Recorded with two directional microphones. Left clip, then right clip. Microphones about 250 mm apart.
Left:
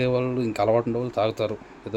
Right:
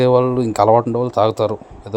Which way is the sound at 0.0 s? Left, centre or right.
Centre.